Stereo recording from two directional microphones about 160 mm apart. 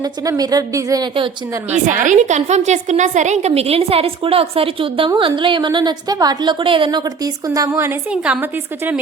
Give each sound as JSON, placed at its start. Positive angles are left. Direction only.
{"t": 0.0, "sound": "a woman's voice", "side_deg": -25}
{"t": 1.9, "sound": "a woman's voice", "side_deg": -50}
{"t": 7.4, "sound": "a woman's voice", "side_deg": -20}
{"t": 8.1, "sound": "a woman's voice", "side_deg": -5}